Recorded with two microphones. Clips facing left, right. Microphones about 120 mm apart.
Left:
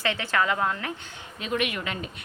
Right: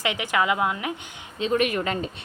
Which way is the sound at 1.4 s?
35° right (ahead or behind).